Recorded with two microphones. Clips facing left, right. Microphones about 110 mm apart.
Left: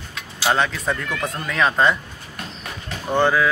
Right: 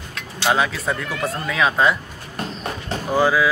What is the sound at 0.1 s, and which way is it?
Speech, centre (ahead or behind).